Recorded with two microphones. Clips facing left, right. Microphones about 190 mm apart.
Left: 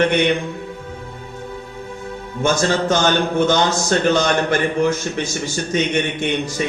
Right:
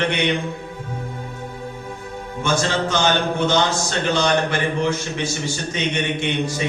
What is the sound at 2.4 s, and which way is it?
A man's voice, 45° left (ahead or behind).